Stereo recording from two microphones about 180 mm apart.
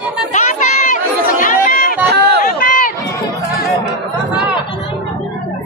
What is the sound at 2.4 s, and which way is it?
Run, 50° left (ahead or behind).